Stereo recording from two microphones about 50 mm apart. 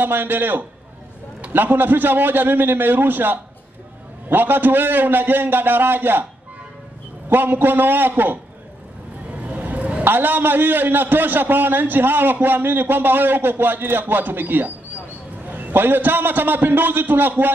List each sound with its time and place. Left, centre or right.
0.0 s a man's voice: right
7.2 s a man's voice: right
9.3 s vehicle: right
10.0 s a man's voice: right